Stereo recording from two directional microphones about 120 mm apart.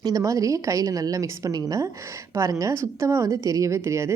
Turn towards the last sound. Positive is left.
turn(degrees=-25)  # may be behind; listen again after turning